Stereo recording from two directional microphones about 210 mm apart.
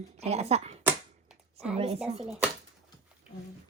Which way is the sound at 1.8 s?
30° right (ahead or behind).